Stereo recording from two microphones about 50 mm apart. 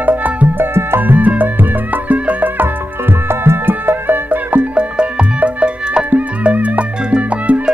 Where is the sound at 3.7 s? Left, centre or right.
Right.